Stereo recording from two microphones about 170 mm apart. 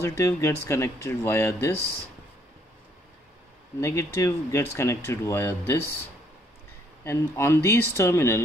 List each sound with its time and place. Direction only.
0.0 s speech: 15° left (ahead or behind)
3.8 s speech: 15° left (ahead or behind)
7.1 s speech: 15° left (ahead or behind)